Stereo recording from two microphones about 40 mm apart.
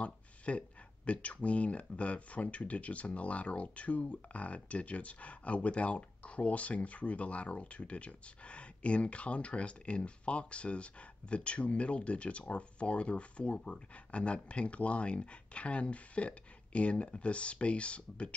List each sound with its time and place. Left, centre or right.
0.0 s speech: left